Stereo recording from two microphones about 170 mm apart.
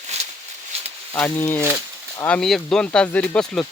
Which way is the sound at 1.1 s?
10° left (ahead or behind).